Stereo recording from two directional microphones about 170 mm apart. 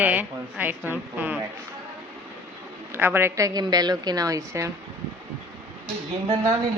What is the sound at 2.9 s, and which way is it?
A woman's voice, 10° right (ahead or behind).